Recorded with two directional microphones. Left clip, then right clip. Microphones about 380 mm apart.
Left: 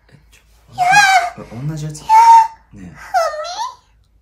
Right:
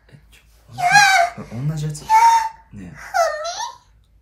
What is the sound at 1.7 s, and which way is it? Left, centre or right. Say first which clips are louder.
Speech: left 1 dB; centre.